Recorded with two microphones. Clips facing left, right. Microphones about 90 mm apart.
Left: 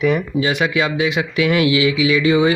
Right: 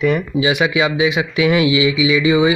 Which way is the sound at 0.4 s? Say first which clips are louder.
Right 2 dB; 15° right (ahead or behind).